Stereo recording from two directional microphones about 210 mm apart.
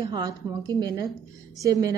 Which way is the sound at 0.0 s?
20° right (ahead or behind).